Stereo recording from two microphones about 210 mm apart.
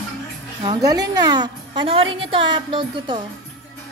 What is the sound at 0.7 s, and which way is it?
A woman's voice, 15° right (ahead or behind).